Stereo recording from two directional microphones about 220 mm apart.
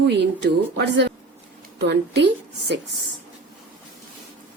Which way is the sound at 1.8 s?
50° right (ahead or behind).